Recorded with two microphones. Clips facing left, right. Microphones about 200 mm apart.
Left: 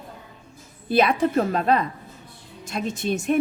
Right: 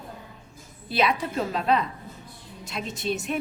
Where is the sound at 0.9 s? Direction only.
50° left (ahead or behind).